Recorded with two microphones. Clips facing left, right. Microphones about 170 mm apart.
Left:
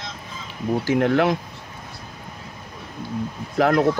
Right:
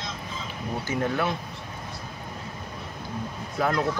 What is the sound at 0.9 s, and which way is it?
Speech, 80° left.